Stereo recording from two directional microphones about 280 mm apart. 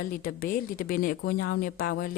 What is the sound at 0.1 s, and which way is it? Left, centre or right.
Speech, left.